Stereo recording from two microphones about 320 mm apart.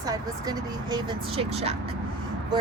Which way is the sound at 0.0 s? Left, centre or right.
Centre.